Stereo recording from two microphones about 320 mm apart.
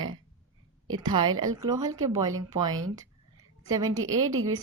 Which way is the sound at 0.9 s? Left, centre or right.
Centre.